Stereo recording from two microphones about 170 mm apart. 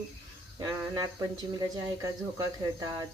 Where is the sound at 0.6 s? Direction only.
20° right (ahead or behind).